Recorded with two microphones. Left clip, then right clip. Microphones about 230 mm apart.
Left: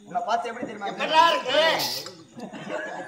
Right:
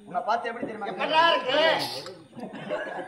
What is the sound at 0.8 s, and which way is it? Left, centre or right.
Speech, left.